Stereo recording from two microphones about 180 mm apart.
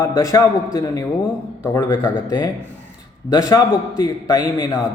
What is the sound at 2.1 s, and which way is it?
A man's voice, 25° left (ahead or behind).